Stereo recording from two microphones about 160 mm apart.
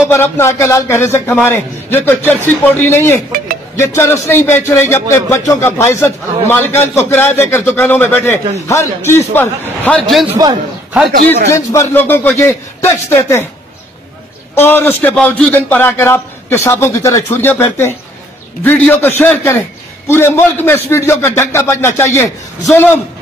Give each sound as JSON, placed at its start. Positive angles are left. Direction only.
{"t": 0.1, "sound": "a man's voice", "side_deg": 15}
{"t": 10.3, "sound": "a man's voice", "side_deg": -25}
{"t": 11.5, "sound": "a man's voice", "side_deg": 20}
{"t": 14.5, "sound": "a man's voice", "side_deg": 15}